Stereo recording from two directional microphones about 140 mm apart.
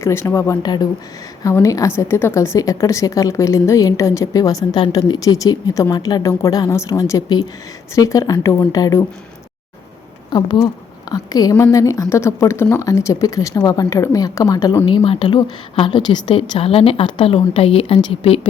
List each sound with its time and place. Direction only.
0.0 s a woman's voice: 20° left (ahead or behind)
10.3 s a woman's voice: 30° left (ahead or behind)
14.8 s a woman's voice: 40° left (ahead or behind)